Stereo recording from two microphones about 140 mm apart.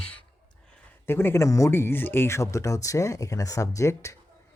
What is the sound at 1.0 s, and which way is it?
Speech, 15° left (ahead or behind).